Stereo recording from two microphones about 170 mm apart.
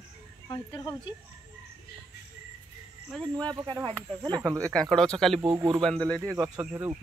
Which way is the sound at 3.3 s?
25° right (ahead or behind).